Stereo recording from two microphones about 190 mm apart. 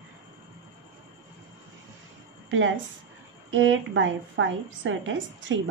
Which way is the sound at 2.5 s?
85° right.